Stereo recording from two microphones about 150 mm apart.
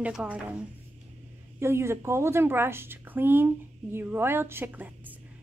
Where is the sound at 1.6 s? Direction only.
15° right (ahead or behind).